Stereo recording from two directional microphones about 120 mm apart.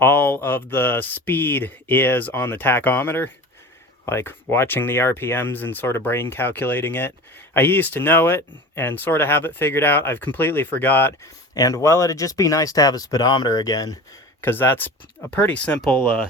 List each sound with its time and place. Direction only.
0.0 s speech: 15° left (ahead or behind)
11.5 s speech: 30° left (ahead or behind)
14.4 s speech: 15° left (ahead or behind)